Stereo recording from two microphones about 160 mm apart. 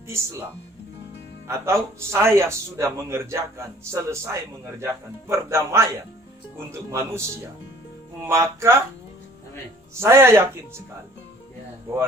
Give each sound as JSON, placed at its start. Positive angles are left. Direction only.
{"t": 0.1, "sound": "a man's voice", "side_deg": -15}
{"t": 1.5, "sound": "a man's voice", "side_deg": -15}
{"t": 9.9, "sound": "a man's voice", "side_deg": -15}